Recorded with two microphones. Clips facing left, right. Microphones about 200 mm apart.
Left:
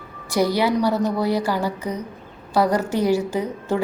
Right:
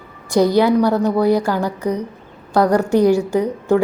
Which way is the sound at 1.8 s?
15° right (ahead or behind).